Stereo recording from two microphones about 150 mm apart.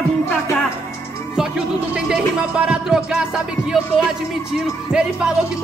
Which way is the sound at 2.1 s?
5° right (ahead or behind).